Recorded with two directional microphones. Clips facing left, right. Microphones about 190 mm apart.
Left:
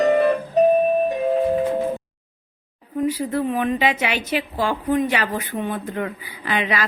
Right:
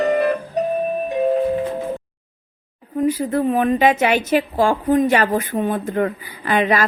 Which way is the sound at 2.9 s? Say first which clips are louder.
Right 3 dB; 50° right (ahead or behind).